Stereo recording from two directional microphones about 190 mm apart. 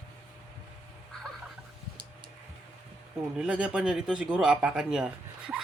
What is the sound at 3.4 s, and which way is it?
Speech, 5° right (ahead or behind).